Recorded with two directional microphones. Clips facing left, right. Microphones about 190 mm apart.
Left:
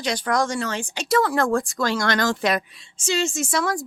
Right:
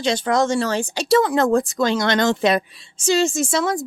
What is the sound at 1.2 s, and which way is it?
Speech, 20° right (ahead or behind).